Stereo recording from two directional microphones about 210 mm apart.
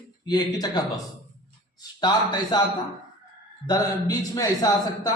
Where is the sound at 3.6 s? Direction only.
20° left (ahead or behind).